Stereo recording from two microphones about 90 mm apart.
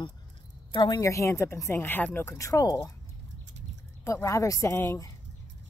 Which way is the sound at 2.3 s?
35° left (ahead or behind).